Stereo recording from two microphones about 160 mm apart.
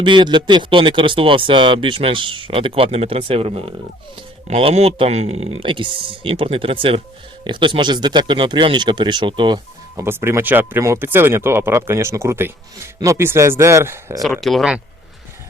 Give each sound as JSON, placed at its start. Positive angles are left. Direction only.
{"t": 0.0, "sound": "speech", "side_deg": -30}
{"t": 9.9, "sound": "speech", "side_deg": -15}
{"t": 14.4, "sound": "speech", "side_deg": 0}